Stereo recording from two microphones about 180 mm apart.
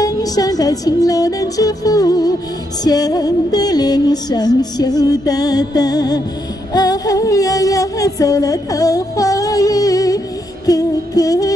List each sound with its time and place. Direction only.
0.0 s music: 20° left (ahead or behind)